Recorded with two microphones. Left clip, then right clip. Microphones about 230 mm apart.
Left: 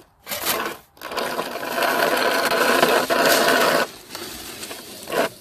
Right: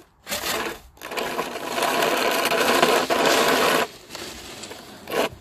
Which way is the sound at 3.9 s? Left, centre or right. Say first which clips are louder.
Left 2 dB; left.